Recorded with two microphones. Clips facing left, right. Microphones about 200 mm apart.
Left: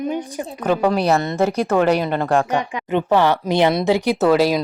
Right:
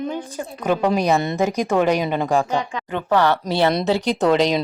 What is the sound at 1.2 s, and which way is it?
Child singing, 15° right (ahead or behind).